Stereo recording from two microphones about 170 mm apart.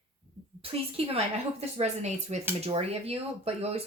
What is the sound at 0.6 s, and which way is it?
Speech, 35° right (ahead or behind).